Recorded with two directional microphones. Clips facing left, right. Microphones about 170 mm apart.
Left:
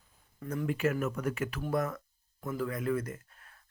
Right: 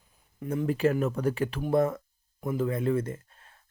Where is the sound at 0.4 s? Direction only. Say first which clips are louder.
Right 5 dB; 25° right (ahead or behind).